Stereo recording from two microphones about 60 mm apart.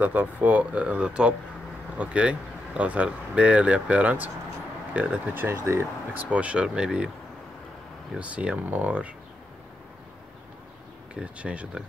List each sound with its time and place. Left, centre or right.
0.0 s speech: right
6.1 s speech: right
8.2 s speech: right
11.1 s speech: right